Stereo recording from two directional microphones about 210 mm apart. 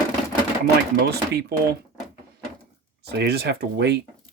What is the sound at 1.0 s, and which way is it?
Speech, 50° right (ahead or behind).